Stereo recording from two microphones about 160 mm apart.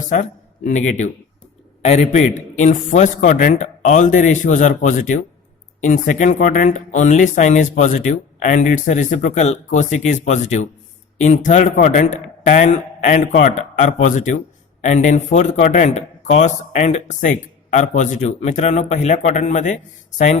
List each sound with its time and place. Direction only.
0.1 s a man's voice: 50° left (ahead or behind)